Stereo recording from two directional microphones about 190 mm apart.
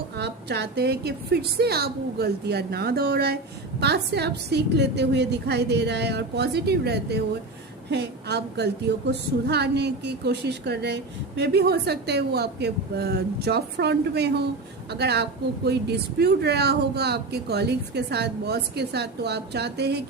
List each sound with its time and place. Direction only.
0.2 s a woman's voice: 60° right (ahead or behind)